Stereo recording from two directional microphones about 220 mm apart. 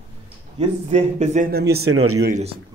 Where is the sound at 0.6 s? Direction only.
30° right (ahead or behind); by 1.9 s 45° right (ahead or behind).